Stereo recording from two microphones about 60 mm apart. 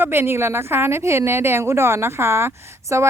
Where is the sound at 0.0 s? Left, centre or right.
Right.